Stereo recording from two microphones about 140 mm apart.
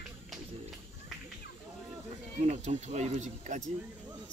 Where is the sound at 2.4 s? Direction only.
50° right (ahead or behind).